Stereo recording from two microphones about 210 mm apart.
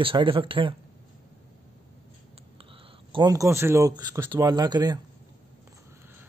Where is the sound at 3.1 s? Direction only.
15° right (ahead or behind).